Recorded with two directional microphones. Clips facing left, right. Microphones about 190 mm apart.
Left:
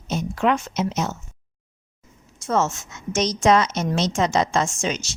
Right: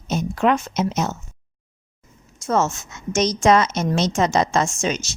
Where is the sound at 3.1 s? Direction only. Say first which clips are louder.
Right 2 dB; 50° right (ahead or behind).